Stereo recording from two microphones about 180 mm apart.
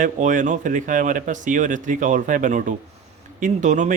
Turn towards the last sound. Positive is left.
turn(degrees=-45)  # may be behind; listen again after turning